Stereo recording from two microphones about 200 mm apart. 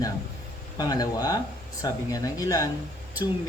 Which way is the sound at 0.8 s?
20° left (ahead or behind).